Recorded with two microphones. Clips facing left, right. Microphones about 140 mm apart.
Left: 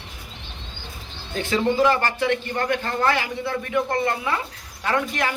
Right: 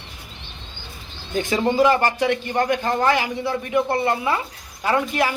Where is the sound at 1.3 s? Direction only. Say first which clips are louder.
Right 2 dB; 15° right (ahead or behind).